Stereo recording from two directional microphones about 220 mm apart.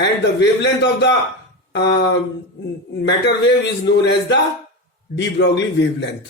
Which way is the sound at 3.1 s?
50° left (ahead or behind).